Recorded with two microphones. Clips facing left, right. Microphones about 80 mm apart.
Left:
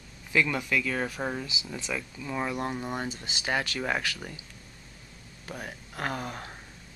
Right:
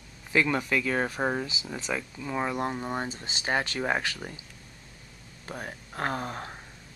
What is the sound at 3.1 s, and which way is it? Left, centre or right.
Speech, right.